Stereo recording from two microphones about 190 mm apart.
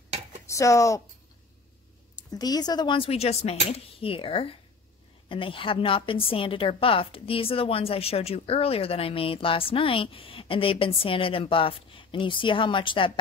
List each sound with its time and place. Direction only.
0.5 s speech: 15° left (ahead or behind)
2.3 s a woman's voice: 20° left (ahead or behind)